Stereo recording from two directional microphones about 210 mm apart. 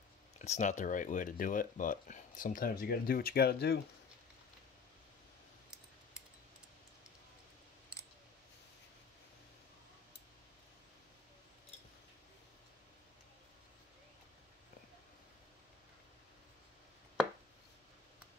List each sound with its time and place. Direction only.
0.4 s speech: 35° left (ahead or behind)